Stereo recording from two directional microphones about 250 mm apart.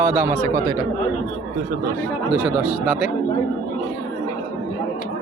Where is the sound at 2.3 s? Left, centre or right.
Centre.